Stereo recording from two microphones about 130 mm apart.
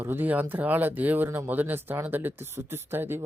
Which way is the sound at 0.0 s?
15° right (ahead or behind).